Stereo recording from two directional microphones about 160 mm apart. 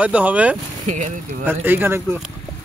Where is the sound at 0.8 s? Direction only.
50° right (ahead or behind).